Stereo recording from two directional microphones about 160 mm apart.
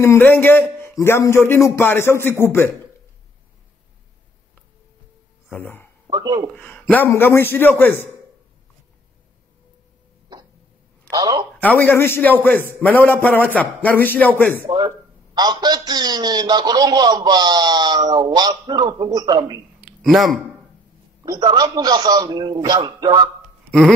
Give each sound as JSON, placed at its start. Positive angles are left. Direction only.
{"t": 0.0, "sound": "a man's voice", "side_deg": 15}
{"t": 5.5, "sound": "a man's voice", "side_deg": 10}
{"t": 6.0, "sound": "a man's voice", "side_deg": -25}
{"t": 6.5, "sound": "a man's voice", "side_deg": 10}
{"t": 11.1, "sound": "a man's voice", "side_deg": -25}
{"t": 11.6, "sound": "a man's voice", "side_deg": 10}
{"t": 15.3, "sound": "a man's voice", "side_deg": -25}
{"t": 20.0, "sound": "speech", "side_deg": 0}
{"t": 21.2, "sound": "a man's voice", "side_deg": -25}